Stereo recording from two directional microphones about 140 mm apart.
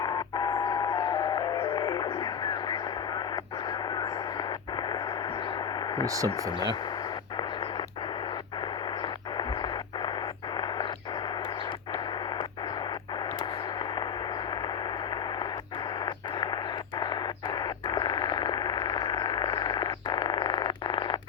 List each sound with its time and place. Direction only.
1.7 s a sound: 30° left (ahead or behind)
4.4 s radio: 30° left (ahead or behind)
6.1 s speech: 25° right (ahead or behind)
9.0 s radio: 30° left (ahead or behind)
16.0 s radio: 35° left (ahead or behind)
17.0 s a sound: 35° left (ahead or behind)